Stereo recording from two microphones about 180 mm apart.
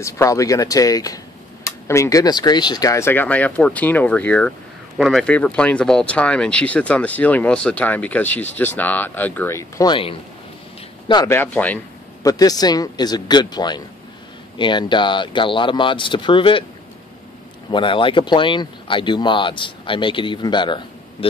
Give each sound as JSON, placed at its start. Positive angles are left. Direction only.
{"t": 0.0, "sound": "speech", "side_deg": 15}
{"t": 11.2, "sound": "a man's voice", "side_deg": 10}
{"t": 12.3, "sound": "speech", "side_deg": 20}
{"t": 17.6, "sound": "speech", "side_deg": 25}